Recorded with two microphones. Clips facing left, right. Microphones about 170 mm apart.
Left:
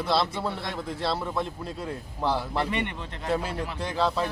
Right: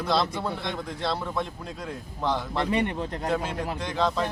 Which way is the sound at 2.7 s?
35° right (ahead or behind).